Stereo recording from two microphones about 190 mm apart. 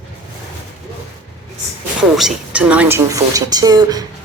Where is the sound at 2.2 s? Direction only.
5° right (ahead or behind).